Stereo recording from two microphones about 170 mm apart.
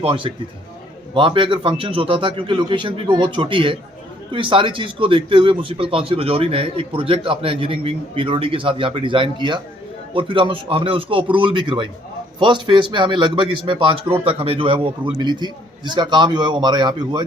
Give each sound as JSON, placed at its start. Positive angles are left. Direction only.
{"t": 0.0, "sound": "a man's voice", "side_deg": -30}